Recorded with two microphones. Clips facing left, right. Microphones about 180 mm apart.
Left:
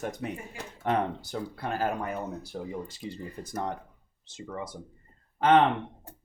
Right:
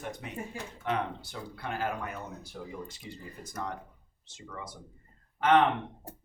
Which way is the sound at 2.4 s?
35° left (ahead or behind).